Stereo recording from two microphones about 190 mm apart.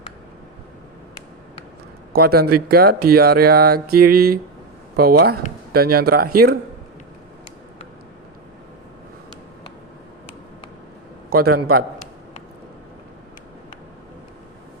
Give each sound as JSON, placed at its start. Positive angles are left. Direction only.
{"t": 2.1, "sound": "speech", "side_deg": -55}
{"t": 11.3, "sound": "speech", "side_deg": -55}